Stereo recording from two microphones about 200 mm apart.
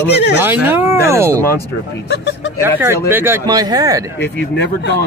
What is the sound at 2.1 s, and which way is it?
Speech, 55° left (ahead or behind).